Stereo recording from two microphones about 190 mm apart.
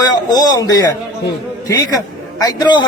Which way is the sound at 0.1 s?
20° left (ahead or behind).